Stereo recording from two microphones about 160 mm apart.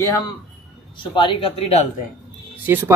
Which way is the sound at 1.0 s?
30° left (ahead or behind).